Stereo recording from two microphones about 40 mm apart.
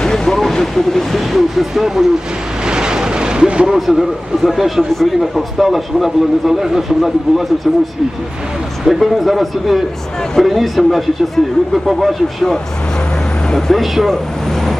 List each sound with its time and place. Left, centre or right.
0.0 s a sound: centre
0.3 s speech: centre
2.6 s vehicle: right
3.7 s speech: centre
8.8 s speech: centre
11.4 s speech: centre
11.7 s speech: centre
13.5 s speech: centre
13.7 s speech: centre